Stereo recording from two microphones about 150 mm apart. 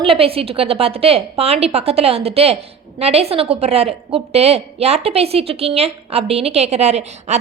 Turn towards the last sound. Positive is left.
turn(degrees=-45)  # may be behind; listen again after turning